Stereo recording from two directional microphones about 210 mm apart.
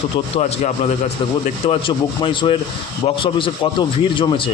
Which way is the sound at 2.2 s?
25° left (ahead or behind).